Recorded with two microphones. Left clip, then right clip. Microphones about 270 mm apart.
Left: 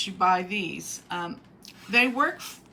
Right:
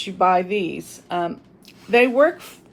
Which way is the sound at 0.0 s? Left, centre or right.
Centre.